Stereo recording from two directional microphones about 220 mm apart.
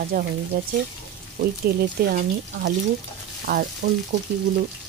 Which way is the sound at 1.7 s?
45° right (ahead or behind).